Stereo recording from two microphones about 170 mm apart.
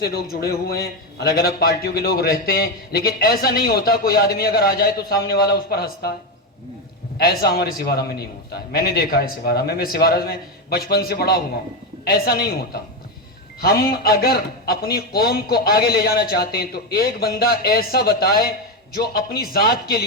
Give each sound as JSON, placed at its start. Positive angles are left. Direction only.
{"t": 0.0, "sound": "a man's voice", "side_deg": 65}
{"t": 7.2, "sound": "a man's voice", "side_deg": 65}
{"t": 13.6, "sound": "a man's voice", "side_deg": 65}